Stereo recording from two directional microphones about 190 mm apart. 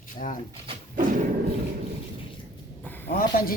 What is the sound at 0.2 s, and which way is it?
Speech, 45° left (ahead or behind).